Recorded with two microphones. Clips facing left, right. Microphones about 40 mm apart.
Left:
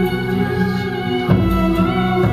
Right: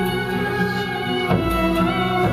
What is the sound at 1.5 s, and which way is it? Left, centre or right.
Music, right.